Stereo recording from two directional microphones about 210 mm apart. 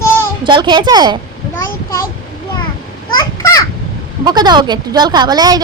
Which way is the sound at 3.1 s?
15° left (ahead or behind).